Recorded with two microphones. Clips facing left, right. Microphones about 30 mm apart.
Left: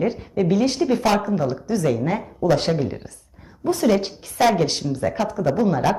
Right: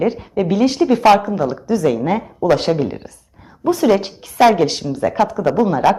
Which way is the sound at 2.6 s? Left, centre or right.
Right.